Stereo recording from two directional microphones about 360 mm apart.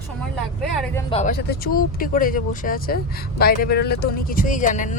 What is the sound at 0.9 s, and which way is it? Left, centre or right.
Speech, centre.